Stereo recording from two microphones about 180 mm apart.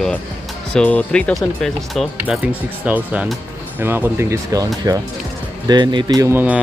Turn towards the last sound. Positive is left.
turn(degrees=-10)  # may be behind; listen again after turning